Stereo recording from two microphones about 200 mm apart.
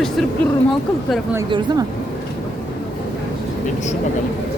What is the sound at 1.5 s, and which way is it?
Speech, 20° right (ahead or behind).